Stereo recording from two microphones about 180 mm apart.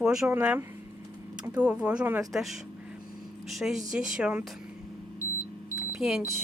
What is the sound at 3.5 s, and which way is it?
Speech, centre (ahead or behind).